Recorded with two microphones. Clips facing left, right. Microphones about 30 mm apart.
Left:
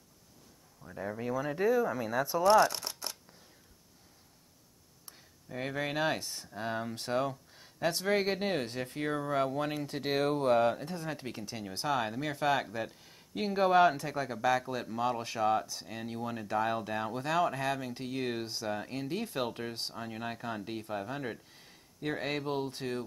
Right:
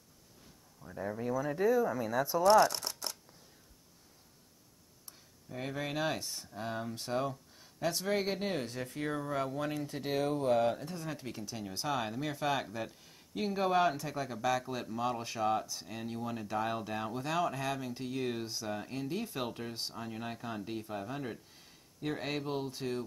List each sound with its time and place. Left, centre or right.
0.9 s speech: centre
1.2 s speech: left; by 3.2 s centre
5.5 s speech: centre
6.5 s speech: centre
8.6 s speech: left
9.0 s speech: left
9.9 s speech: left
10.9 s speech: centre
18.7 s speech: centre